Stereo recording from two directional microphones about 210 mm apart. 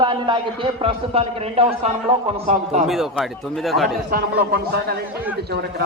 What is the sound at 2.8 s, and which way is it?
Speech, centre (ahead or behind).